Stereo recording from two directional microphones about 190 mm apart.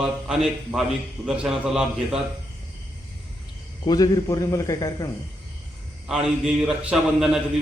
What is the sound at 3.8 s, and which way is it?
A man's voice, 20° left (ahead or behind).